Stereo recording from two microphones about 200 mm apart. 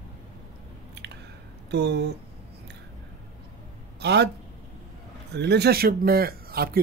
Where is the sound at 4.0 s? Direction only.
55° right (ahead or behind).